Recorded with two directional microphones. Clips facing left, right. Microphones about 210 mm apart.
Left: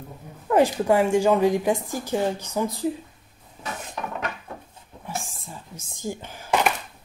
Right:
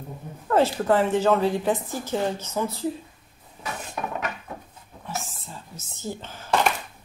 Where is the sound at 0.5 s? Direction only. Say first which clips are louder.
Left 1 dB; 15° left (ahead or behind).